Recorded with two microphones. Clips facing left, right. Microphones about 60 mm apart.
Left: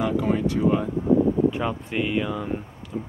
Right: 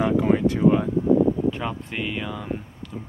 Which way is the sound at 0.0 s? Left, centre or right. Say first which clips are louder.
Right 3 dB; centre.